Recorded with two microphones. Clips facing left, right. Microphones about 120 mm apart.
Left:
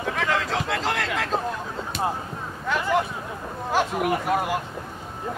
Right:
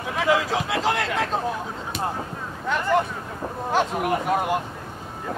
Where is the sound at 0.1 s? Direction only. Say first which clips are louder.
Right 4 dB; 5° right (ahead or behind).